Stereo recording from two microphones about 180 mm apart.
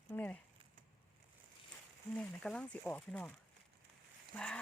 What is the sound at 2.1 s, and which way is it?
Speech, 5° left (ahead or behind).